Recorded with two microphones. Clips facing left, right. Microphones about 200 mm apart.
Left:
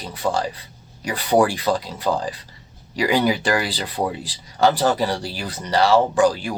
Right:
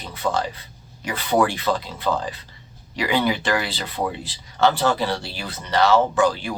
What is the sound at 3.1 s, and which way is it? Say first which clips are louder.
Speech: left 2 dB; 40° left (ahead or behind).